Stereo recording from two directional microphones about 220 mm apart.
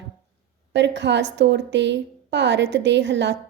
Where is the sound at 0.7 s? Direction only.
55° right (ahead or behind).